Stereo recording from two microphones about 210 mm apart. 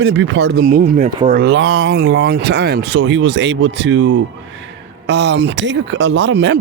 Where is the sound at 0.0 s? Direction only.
55° right (ahead or behind).